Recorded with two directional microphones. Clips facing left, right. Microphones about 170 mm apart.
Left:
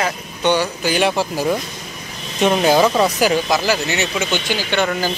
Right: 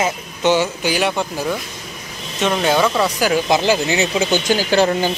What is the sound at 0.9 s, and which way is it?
Speech, centre (ahead or behind).